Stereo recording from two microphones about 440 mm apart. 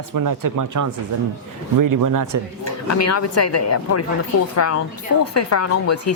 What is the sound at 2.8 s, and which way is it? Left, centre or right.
Speech, left.